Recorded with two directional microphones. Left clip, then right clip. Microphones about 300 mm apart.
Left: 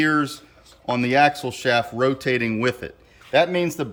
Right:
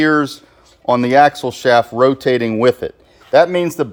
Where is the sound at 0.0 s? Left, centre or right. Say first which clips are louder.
Right 6 dB; centre.